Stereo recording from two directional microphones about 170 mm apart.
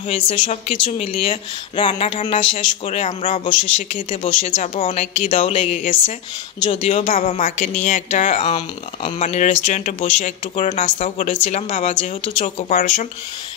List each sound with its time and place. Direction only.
0.1 s speech: 35° left (ahead or behind)
3.9 s speech: 30° left (ahead or behind)
4.4 s speech: 50° left (ahead or behind); by 5.8 s 35° left (ahead or behind)
5.8 s speech: 50° left (ahead or behind)
6.6 s speech: 35° left (ahead or behind)